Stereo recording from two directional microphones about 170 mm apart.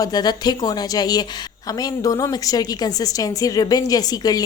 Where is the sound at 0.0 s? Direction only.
25° left (ahead or behind).